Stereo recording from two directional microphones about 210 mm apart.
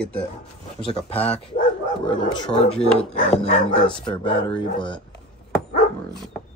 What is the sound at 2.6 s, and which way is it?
Speech, 30° left (ahead or behind).